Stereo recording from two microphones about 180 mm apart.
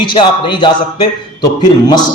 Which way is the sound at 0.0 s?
25° left (ahead or behind).